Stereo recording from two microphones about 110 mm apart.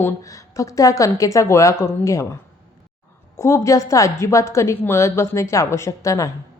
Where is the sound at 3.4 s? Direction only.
25° left (ahead or behind).